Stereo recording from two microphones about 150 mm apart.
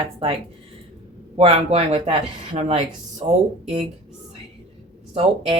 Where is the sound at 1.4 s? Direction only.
45° right (ahead or behind).